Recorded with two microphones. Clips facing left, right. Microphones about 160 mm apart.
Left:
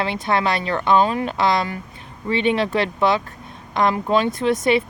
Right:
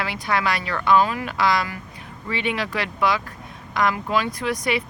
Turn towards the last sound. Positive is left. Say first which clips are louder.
# left 6 dB
turn(degrees=25)  # may be behind; listen again after turning